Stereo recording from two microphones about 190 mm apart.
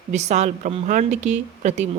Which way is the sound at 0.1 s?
35° right (ahead or behind).